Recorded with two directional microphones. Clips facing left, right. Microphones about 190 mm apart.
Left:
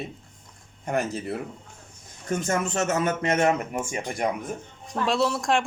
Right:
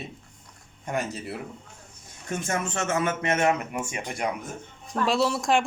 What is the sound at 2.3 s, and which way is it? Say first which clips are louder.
A man's voice: left 3 dB; 40° left (ahead or behind).